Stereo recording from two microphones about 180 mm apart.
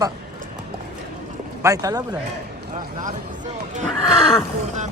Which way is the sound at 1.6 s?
20° right (ahead or behind).